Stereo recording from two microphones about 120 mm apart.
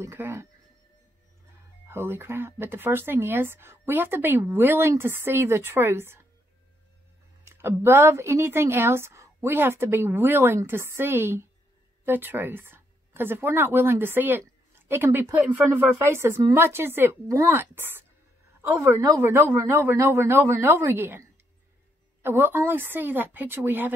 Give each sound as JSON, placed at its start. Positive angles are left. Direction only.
{"t": 0.0, "sound": "speech", "side_deg": -20}
{"t": 1.9, "sound": "speech", "side_deg": -20}
{"t": 7.4, "sound": "a woman's voice", "side_deg": -20}